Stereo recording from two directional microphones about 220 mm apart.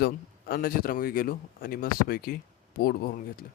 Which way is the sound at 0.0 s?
45° left (ahead or behind).